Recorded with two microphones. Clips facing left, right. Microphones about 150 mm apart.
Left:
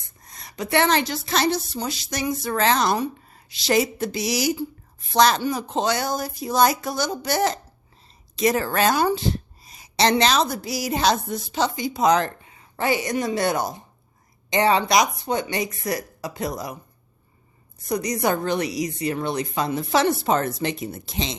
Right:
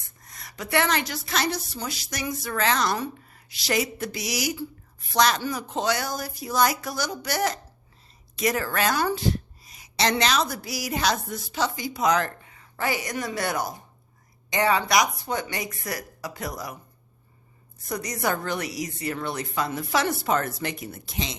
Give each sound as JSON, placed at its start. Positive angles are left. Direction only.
{"t": 0.2, "sound": "a woman's voice", "side_deg": 20}
{"t": 17.8, "sound": "a woman's voice", "side_deg": 20}